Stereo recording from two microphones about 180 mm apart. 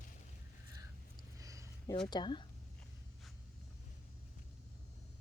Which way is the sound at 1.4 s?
20° right (ahead or behind).